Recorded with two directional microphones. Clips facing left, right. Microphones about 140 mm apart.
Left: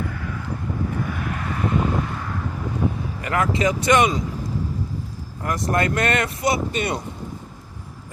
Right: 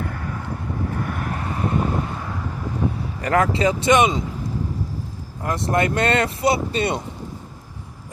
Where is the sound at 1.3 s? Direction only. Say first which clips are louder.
Right 1 dB; 30° right (ahead or behind).